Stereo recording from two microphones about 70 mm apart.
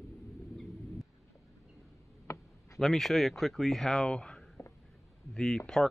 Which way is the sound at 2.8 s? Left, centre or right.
Centre.